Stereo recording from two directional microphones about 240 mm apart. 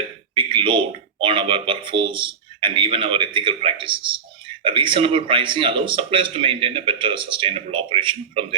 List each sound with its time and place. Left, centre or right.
0.3 s speech: right